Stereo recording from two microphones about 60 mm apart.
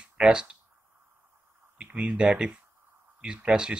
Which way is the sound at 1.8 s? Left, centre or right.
Right.